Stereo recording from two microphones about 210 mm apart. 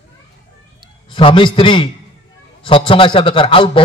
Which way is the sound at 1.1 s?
25° left (ahead or behind).